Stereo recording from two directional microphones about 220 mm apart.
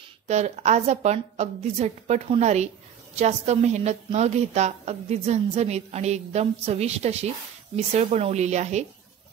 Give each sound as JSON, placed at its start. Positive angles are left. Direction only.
{"t": 0.3, "sound": "a woman's voice", "side_deg": -30}